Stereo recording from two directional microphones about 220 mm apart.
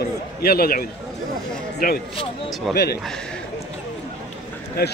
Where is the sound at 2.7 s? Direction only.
45° left (ahead or behind).